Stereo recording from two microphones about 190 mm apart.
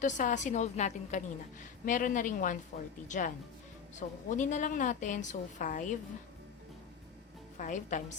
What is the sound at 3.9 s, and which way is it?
A woman's voice, 40° left (ahead or behind).